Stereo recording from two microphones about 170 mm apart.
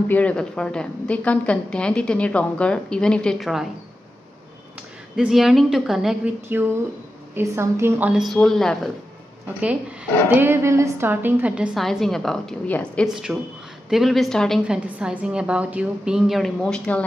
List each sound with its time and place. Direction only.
0.1 s a woman's voice: 10° left (ahead or behind)
5.1 s a woman's voice: centre (ahead or behind)
10.3 s a woman's voice: 15° right (ahead or behind); by 13.0 s 10° left (ahead or behind)
13.0 s a woman's voice: centre (ahead or behind)